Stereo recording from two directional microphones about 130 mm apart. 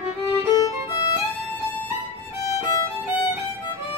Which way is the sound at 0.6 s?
30° left (ahead or behind).